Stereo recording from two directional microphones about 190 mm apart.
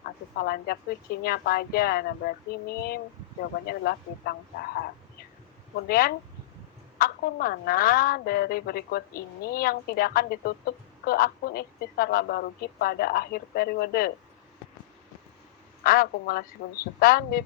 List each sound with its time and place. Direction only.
0.0 s a woman's voice: 55° left (ahead or behind)
5.9 s a woman's voice: 50° left (ahead or behind)
15.8 s a woman's voice: 50° left (ahead or behind)